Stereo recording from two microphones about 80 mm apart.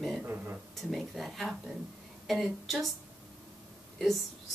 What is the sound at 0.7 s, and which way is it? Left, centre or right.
Speech, centre.